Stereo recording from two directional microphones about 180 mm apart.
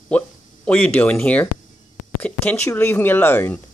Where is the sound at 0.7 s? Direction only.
10° left (ahead or behind).